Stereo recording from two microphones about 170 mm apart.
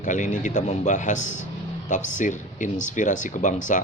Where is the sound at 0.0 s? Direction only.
50° left (ahead or behind).